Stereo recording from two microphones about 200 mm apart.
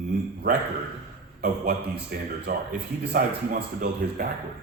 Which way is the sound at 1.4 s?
50° right (ahead or behind).